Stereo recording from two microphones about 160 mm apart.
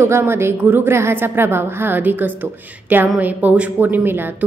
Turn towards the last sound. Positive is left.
turn(degrees=-10)  # may be behind; listen again after turning